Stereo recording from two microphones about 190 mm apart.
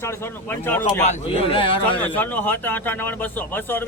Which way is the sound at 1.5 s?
25° left (ahead or behind).